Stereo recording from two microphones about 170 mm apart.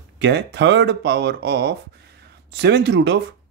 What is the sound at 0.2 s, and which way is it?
Speech, 90° right.